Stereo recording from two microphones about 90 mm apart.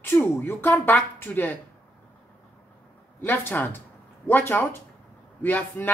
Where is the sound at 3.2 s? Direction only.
20° left (ahead or behind).